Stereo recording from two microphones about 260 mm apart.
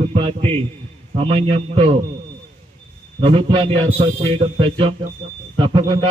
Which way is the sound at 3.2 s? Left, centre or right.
Centre.